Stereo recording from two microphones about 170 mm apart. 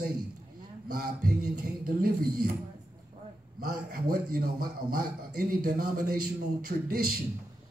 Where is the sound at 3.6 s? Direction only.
60° right (ahead or behind).